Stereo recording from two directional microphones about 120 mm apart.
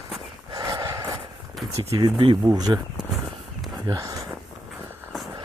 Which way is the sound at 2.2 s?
40° right (ahead or behind).